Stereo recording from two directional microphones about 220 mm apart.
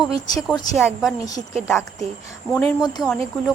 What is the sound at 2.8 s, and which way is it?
Speech, 20° left (ahead or behind).